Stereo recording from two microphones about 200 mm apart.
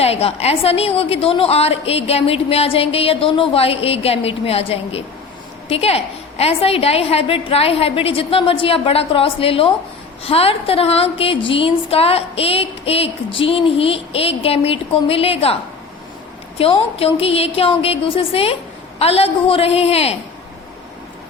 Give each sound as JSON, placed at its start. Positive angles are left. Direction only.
{"t": 0.0, "sound": "speech", "side_deg": 30}
{"t": 16.6, "sound": "a woman's voice", "side_deg": 30}